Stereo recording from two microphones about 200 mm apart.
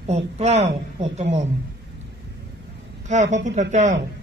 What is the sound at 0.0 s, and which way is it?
Speech, 35° right (ahead or behind).